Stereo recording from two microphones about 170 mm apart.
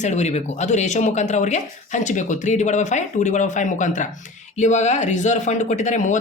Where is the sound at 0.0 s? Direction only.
45° left (ahead or behind).